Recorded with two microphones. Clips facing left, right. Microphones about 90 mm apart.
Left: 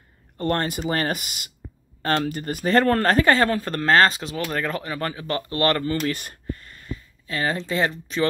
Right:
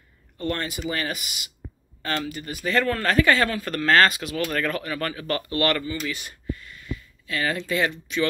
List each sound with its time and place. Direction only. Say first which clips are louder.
0.4 s speech: left 4 dB; 40° left (ahead or behind)
5.9 s speech: left 5 dB; 50° left (ahead or behind)